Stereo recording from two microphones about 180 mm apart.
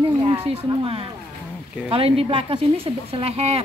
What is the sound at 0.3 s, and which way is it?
Speech, 30° right (ahead or behind).